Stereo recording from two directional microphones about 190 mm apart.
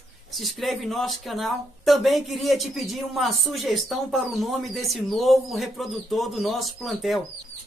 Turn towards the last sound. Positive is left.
turn(degrees=0)  # may be behind; listen again after turning